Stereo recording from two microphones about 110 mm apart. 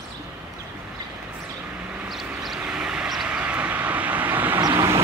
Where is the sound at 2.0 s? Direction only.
Centre (ahead or behind).